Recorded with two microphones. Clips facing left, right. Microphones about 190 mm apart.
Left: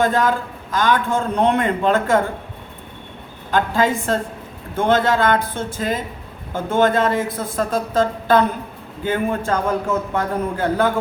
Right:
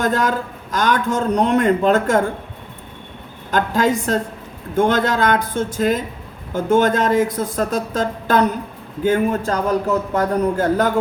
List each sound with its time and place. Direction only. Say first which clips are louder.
0.0 s a man's voice: left 1 dB; 45° right (ahead or behind)
3.5 s a man's voice: right 1 dB; 45° right (ahead or behind)